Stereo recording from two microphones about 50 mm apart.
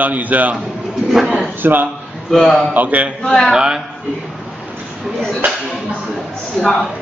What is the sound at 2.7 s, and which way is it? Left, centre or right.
Speech, right.